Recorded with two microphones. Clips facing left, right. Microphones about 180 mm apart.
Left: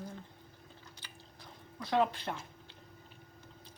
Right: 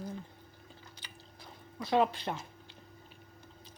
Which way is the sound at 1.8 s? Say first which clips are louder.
Right 2 dB; 15° right (ahead or behind).